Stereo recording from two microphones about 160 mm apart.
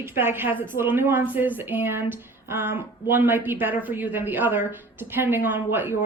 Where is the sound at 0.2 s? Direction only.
15° right (ahead or behind).